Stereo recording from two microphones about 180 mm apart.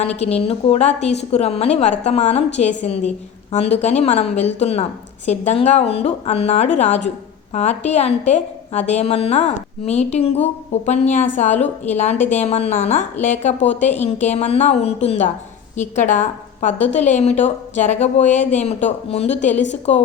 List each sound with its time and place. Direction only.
0.0 s a woman's voice: 35° left (ahead or behind)